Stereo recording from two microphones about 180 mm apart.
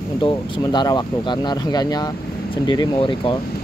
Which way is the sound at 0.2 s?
25° left (ahead or behind).